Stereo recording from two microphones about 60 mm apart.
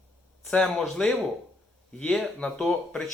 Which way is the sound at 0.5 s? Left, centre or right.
Centre.